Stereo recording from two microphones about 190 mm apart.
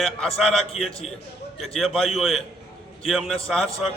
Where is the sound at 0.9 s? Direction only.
30° left (ahead or behind).